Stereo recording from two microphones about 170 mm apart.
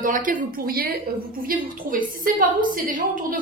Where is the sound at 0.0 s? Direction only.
50° right (ahead or behind).